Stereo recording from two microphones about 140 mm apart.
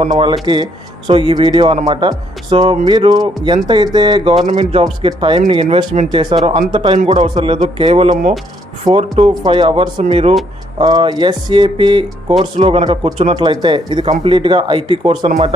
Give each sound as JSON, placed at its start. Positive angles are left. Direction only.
{"t": 0.2, "sound": "speech", "side_deg": -35}
{"t": 4.4, "sound": "a man's voice", "side_deg": -50}
{"t": 8.8, "sound": "speech", "side_deg": -40}